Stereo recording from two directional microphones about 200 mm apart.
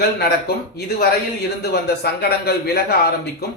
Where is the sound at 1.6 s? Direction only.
50° left (ahead or behind).